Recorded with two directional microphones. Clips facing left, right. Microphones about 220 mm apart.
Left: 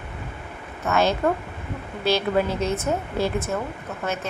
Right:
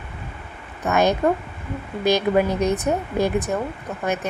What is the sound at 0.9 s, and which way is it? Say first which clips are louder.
A woman's voice: right 3 dB; 15° right (ahead or behind).